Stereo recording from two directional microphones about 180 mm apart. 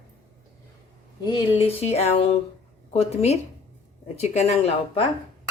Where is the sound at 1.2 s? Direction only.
30° left (ahead or behind).